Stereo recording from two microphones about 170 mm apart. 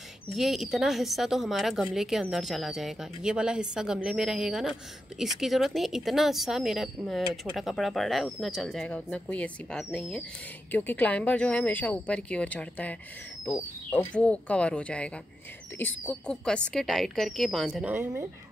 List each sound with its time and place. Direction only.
0.3 s speech: centre (ahead or behind)
17.8 s speech: 15° right (ahead or behind)